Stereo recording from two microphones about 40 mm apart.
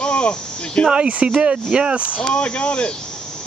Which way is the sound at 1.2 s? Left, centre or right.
Right.